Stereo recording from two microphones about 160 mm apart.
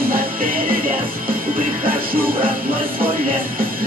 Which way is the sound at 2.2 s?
10° right (ahead or behind).